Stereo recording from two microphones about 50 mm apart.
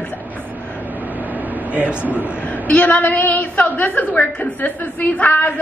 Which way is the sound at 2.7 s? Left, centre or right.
Left.